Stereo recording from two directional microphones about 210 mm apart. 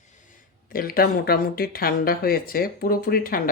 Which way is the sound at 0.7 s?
45° left (ahead or behind).